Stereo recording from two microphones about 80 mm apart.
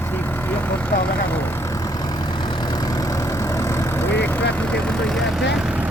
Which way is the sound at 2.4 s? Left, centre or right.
Left.